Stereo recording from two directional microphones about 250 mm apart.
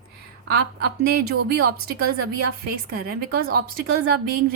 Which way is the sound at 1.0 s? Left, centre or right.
Right.